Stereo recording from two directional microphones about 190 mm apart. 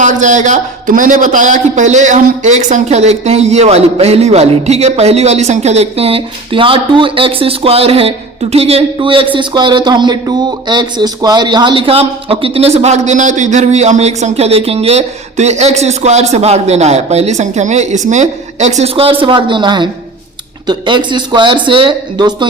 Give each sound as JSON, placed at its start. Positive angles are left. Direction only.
{"t": 0.0, "sound": "a man's voice", "side_deg": -40}